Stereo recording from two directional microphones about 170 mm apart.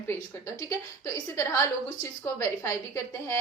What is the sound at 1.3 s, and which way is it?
A woman's voice, 15° left (ahead or behind).